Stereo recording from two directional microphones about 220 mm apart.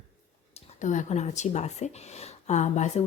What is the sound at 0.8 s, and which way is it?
Speech, 35° left (ahead or behind).